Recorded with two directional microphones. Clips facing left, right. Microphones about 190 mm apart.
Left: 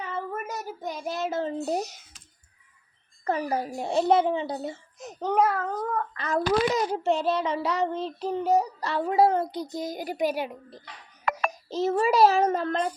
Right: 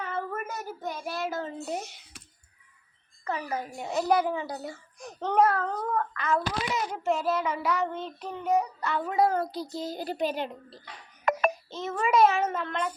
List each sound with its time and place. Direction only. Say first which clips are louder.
0.1 s a child's voice: left 2 dB; 10° left (ahead or behind); by 2.0 s 40° left (ahead or behind)
3.2 s a child's voice: left 5 dB; 35° left (ahead or behind)
5.2 s a child's voice: even; 5° left (ahead or behind)
6.1 s a child's voice: left 5 dB; 35° left (ahead or behind); by 10.8 s 15° left (ahead or behind)
11.7 s a child's voice: left 4 dB; 35° left (ahead or behind)